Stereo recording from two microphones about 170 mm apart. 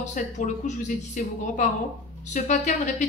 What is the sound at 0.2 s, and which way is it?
Speech, 50° left (ahead or behind).